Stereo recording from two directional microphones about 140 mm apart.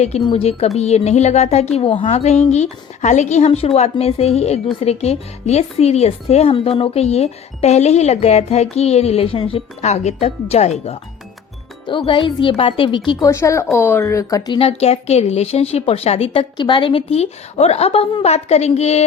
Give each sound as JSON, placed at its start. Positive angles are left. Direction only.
{"t": 0.3, "sound": "a woman's voice", "side_deg": 45}
{"t": 11.9, "sound": "speech", "side_deg": 35}
{"t": 13.1, "sound": "speech", "side_deg": 25}
{"t": 14.6, "sound": "a woman's voice", "side_deg": 45}